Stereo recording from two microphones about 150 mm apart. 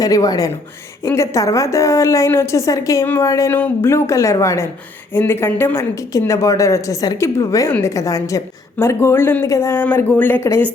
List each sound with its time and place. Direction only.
0.0 s a woman's voice: 25° left (ahead or behind)